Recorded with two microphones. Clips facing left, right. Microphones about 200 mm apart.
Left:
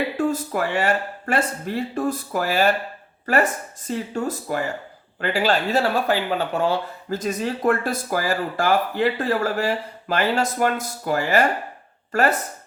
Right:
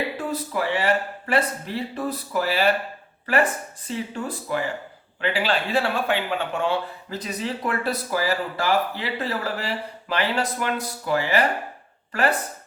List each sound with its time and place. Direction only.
0.2 s speech: 45° left (ahead or behind)